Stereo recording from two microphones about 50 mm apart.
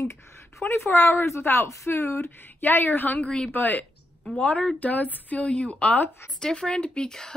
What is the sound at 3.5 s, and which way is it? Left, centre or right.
Speech, left.